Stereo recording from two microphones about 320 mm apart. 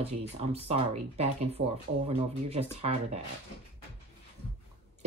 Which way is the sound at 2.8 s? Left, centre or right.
Centre.